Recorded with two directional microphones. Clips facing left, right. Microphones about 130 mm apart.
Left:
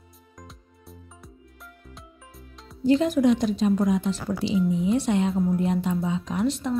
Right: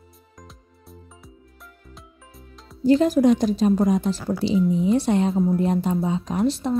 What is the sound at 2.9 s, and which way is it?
Speech, 40° right (ahead or behind).